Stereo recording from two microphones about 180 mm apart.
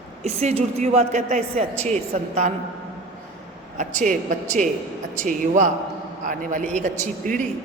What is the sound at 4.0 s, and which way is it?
A woman's voice, 45° right (ahead or behind).